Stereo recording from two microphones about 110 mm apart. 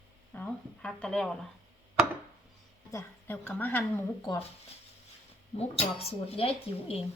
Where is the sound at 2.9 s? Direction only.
20° left (ahead or behind).